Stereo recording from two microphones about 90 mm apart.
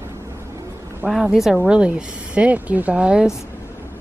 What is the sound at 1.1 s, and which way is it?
Speech, centre (ahead or behind).